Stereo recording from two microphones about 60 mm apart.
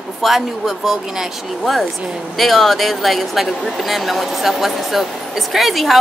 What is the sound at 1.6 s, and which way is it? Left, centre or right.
Speech, centre.